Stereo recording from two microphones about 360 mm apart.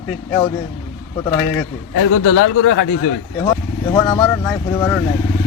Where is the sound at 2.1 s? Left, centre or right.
Left.